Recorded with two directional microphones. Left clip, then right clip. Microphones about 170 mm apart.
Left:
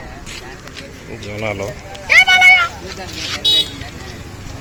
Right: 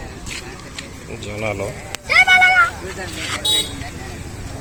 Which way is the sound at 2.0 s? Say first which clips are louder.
Left 3 dB; 85° right.